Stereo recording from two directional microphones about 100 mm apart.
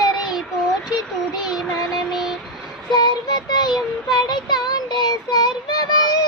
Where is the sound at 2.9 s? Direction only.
45° left (ahead or behind).